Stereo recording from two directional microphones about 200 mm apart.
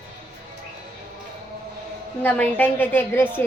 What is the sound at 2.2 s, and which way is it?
A woman's voice, 10° left (ahead or behind).